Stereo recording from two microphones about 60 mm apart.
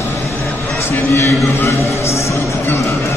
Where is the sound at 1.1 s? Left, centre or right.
Left.